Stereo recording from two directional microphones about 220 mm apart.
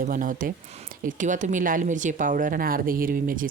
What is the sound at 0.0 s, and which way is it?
A woman's voice, 40° right (ahead or behind).